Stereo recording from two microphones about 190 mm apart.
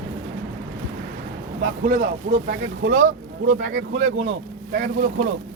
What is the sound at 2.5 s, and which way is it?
Speech, 75° right (ahead or behind).